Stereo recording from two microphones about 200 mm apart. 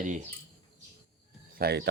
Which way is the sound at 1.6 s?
55° right (ahead or behind).